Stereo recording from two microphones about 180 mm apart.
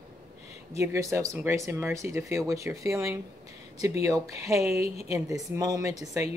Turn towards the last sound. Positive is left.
turn(degrees=-20)  # may be behind; listen again after turning